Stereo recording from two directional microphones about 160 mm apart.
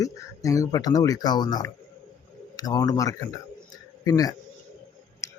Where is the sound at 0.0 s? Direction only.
20° left (ahead or behind).